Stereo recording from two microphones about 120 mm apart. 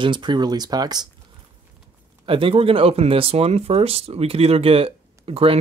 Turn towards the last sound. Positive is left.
turn(degrees=-55)  # may be behind; listen again after turning